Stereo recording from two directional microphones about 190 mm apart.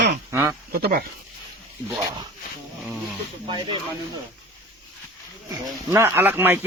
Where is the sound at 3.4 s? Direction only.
25° right (ahead or behind).